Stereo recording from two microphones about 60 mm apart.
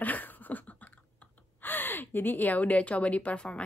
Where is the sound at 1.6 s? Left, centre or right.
Left; by 3.6 s centre.